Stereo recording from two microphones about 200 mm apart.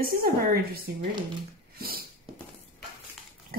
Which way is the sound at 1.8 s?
50° right (ahead or behind).